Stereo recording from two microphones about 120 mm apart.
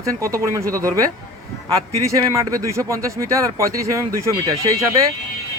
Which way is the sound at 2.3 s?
30° right (ahead or behind).